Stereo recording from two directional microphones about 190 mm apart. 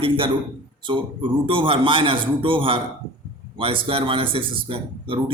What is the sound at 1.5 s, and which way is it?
A man's voice, 25° right (ahead or behind).